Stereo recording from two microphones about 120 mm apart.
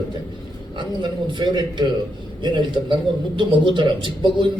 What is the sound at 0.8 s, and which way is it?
A man's voice, 40° right (ahead or behind).